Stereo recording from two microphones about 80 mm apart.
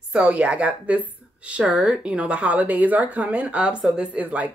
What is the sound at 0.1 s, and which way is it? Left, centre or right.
Speech, centre.